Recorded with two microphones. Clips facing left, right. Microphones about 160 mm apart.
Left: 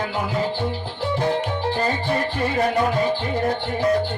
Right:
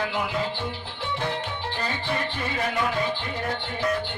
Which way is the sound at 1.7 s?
40° left (ahead or behind).